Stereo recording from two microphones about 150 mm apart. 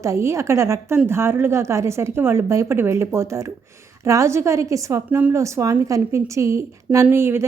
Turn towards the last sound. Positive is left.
turn(degrees=-15)  # may be behind; listen again after turning